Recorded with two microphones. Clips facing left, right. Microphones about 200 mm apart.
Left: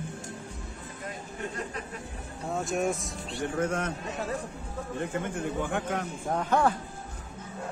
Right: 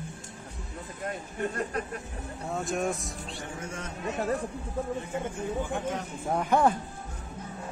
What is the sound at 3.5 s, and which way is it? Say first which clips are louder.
Speech: left 12 dB; 65° left (ahead or behind).